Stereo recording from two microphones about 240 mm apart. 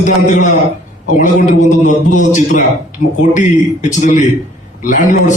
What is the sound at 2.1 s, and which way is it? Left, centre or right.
A man's voice, left.